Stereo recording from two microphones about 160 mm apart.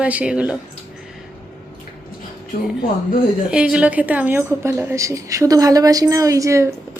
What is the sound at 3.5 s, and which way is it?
A woman's voice, 5° right (ahead or behind).